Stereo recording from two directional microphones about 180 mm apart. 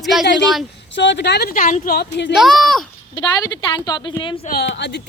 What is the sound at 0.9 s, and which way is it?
Speech, 75° left (ahead or behind).